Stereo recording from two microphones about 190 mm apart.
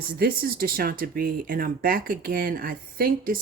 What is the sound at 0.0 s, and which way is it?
Speech, 50° right (ahead or behind).